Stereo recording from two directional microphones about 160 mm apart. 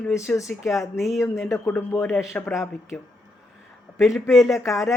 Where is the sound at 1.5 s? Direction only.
10° left (ahead or behind).